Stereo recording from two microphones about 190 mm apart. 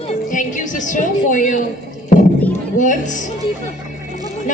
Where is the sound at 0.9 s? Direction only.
40° left (ahead or behind).